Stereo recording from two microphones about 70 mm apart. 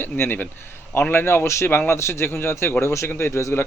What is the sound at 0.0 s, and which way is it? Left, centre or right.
Speech, left.